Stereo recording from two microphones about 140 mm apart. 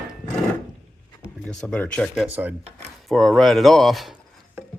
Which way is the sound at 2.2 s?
15° right (ahead or behind).